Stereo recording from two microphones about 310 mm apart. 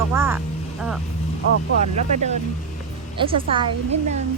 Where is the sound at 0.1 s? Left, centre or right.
Centre.